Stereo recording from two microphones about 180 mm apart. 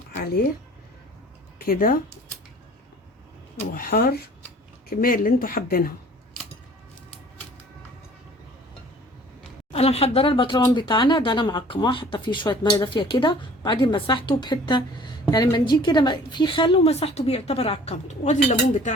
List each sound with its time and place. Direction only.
1.5 s speech: 50° left (ahead or behind)
3.8 s speech: 55° left (ahead or behind)
9.7 s a woman's voice: 35° left (ahead or behind)